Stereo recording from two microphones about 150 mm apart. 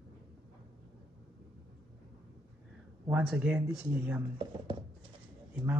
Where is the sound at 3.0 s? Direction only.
10° right (ahead or behind).